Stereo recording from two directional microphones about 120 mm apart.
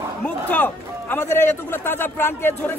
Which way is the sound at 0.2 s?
15° left (ahead or behind).